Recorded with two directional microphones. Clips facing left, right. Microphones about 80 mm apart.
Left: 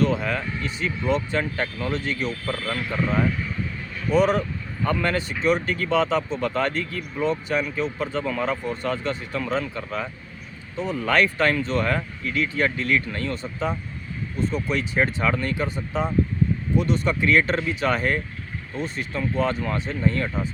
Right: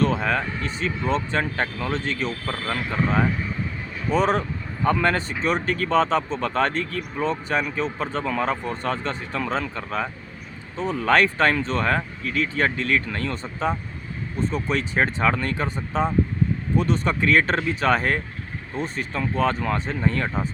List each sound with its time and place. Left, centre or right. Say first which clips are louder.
0.0 s speech: right 1 dB; right
13.1 s speech: even; right